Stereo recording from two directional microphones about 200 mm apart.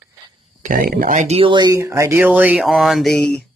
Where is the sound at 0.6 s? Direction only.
45° right (ahead or behind).